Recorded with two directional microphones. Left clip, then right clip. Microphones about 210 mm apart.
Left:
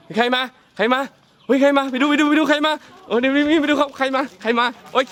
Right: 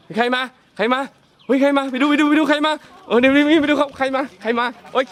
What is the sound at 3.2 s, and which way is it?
Speech, 50° right (ahead or behind).